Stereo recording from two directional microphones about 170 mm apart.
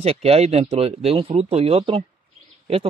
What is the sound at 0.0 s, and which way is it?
Speech, 35° right (ahead or behind).